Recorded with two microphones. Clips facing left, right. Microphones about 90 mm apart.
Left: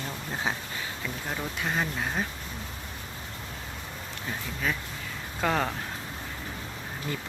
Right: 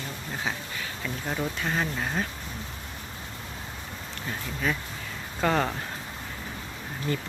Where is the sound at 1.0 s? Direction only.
Centre (ahead or behind).